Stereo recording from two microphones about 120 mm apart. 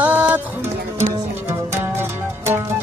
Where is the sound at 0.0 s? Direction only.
15° right (ahead or behind).